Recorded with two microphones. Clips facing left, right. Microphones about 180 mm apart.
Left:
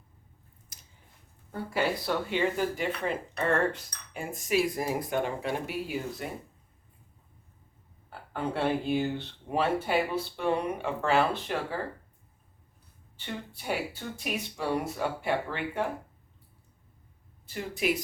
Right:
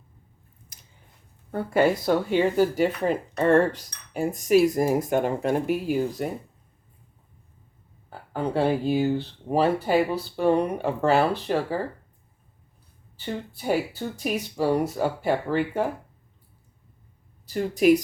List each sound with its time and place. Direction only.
0.7 s a sound: 60° right (ahead or behind)
1.5 s speech: 55° right (ahead or behind)
8.3 s speech: 35° right (ahead or behind)
13.1 s speech: 40° right (ahead or behind)
17.4 s speech: 40° right (ahead or behind)